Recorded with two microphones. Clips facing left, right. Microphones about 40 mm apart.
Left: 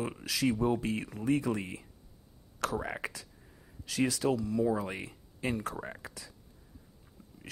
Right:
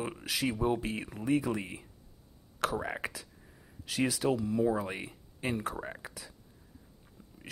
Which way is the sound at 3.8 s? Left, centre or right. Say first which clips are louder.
Even; right.